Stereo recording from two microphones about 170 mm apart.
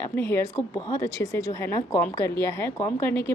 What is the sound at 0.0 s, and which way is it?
A woman's voice, 15° left (ahead or behind).